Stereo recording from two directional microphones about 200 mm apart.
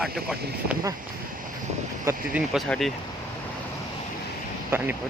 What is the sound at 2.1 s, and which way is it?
Speech, 5° right (ahead or behind).